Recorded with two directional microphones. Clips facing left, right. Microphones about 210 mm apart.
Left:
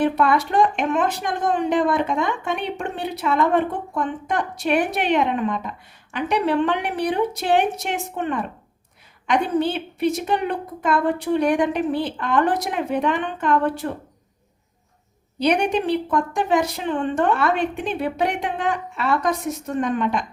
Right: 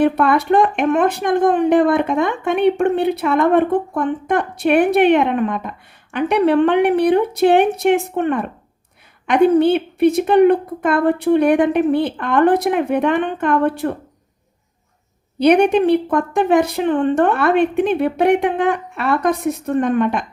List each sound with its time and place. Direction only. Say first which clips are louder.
0.0 s speech: right 4 dB; 60° right (ahead or behind)
15.4 s speech: right 7 dB; 55° right (ahead or behind)